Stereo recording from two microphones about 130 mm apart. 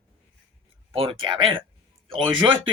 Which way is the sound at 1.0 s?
45° right (ahead or behind).